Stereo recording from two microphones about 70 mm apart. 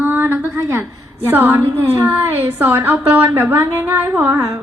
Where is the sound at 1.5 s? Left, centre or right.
Right.